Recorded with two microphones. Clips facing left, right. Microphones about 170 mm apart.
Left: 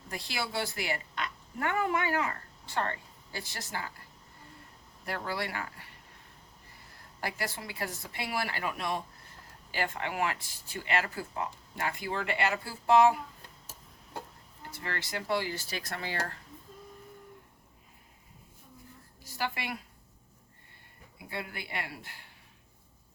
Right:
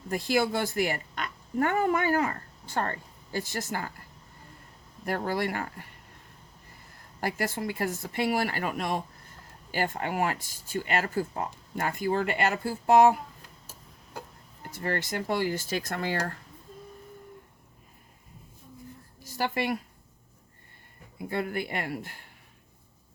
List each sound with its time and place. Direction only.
0.1 s speech: 50° right (ahead or behind)
5.0 s speech: 45° right (ahead or behind)
7.2 s speech: 45° right (ahead or behind)
14.7 s speech: 45° right (ahead or behind)
19.2 s a woman's voice: 45° right (ahead or behind)
21.2 s speech: 50° right (ahead or behind)